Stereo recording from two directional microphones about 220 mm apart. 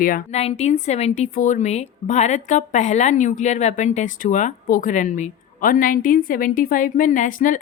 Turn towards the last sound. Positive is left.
turn(degrees=35)  # may be behind; listen again after turning